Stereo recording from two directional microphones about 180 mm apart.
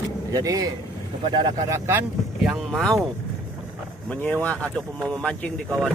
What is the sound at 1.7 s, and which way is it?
Speech, 15° right (ahead or behind).